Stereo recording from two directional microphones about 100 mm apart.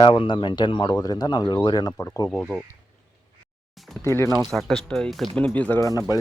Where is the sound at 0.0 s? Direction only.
55° left (ahead or behind).